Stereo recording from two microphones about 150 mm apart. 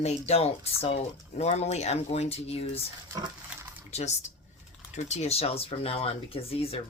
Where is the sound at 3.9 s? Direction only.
50° left (ahead or behind).